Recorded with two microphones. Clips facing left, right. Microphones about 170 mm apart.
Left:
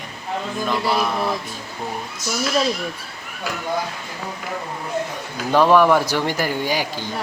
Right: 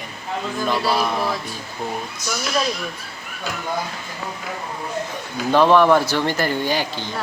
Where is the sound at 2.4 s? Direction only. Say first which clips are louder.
Left 3 dB; 25° left (ahead or behind).